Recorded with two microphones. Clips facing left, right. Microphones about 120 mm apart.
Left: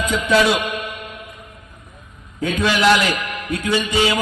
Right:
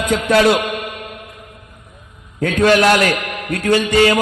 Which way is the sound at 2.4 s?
55° right (ahead or behind).